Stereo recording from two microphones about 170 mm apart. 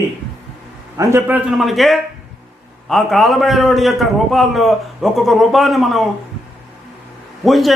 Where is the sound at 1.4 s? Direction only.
Centre (ahead or behind).